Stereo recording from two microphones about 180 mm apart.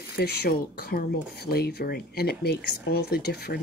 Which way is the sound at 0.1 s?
60° left (ahead or behind).